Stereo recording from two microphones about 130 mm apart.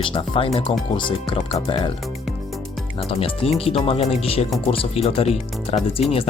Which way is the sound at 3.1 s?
45° left (ahead or behind).